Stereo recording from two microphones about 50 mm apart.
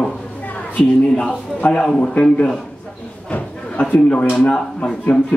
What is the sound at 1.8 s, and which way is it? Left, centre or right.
Speech, centre.